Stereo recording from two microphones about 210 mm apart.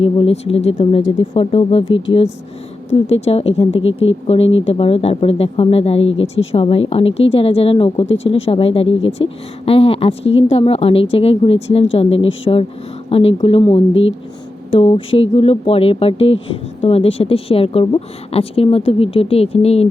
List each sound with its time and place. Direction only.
0.0 s speech: 30° left (ahead or behind)
8.0 s speech: 65° left (ahead or behind)
8.3 s speech: 25° left (ahead or behind)